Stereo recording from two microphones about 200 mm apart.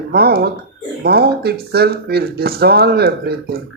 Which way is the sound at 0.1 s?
50° right (ahead or behind).